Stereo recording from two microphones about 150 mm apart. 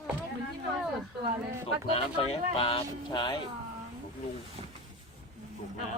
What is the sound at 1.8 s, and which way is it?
Speech, 40° left (ahead or behind).